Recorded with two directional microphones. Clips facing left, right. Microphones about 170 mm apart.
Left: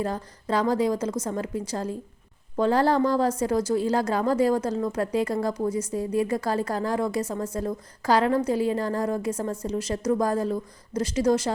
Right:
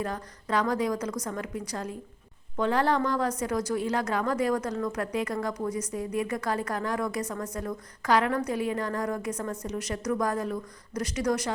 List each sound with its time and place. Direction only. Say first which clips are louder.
0.0 s a woman's voice: left 4 dB; 30° left (ahead or behind)